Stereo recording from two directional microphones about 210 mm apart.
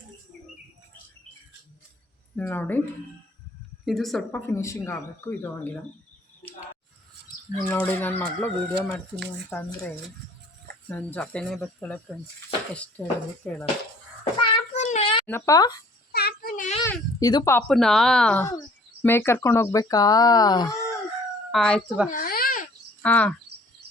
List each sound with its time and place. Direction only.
2.3 s speech: 10° left (ahead or behind)
3.8 s speech: centre (ahead or behind)
4.4 s speech: 15° left (ahead or behind)
7.6 s speech: 10° left (ahead or behind)
14.7 s child singing: 35° left (ahead or behind)
15.3 s speech: 15° left (ahead or behind)
16.1 s a sound: 45° left (ahead or behind)
16.8 s speech: 15° left (ahead or behind)
21.5 s speech: 5° left (ahead or behind)
22.1 s a sound: 45° left (ahead or behind)
23.0 s speech: 5° left (ahead or behind)